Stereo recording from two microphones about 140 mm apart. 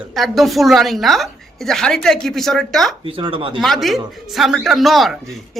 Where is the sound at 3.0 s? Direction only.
40° right (ahead or behind).